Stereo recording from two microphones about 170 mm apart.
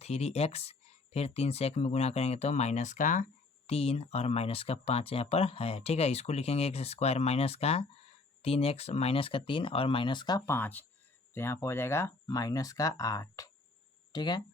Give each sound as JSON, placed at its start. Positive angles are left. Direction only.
{"t": 0.0, "sound": "speech", "side_deg": 40}
{"t": 3.7, "sound": "speech", "side_deg": 35}